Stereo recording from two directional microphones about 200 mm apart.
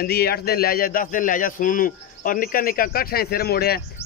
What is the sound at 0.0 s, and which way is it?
Speech, 50° left (ahead or behind).